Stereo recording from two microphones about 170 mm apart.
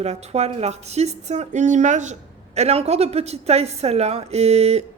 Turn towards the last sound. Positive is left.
turn(degrees=-40)  # may be behind; listen again after turning